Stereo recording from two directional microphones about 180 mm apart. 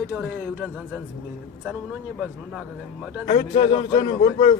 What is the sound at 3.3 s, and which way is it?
A man's voice, 30° left (ahead or behind).